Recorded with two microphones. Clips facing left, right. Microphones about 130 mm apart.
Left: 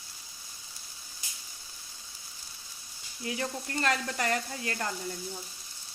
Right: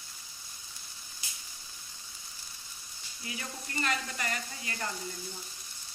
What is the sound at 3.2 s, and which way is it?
Speech, 70° left (ahead or behind).